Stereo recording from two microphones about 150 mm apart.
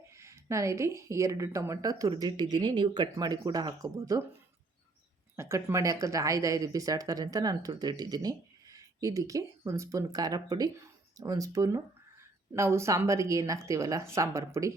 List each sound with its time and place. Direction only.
0.1 s speech: 20° right (ahead or behind)
5.4 s speech: 20° right (ahead or behind)